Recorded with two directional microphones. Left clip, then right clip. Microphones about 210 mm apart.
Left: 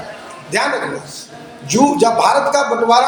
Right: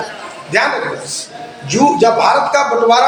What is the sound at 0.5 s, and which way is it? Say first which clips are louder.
A man's voice: right 3 dB; 40° left (ahead or behind).